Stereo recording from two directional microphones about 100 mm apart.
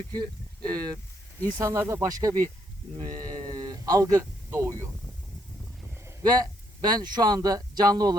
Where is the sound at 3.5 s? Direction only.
40° right (ahead or behind).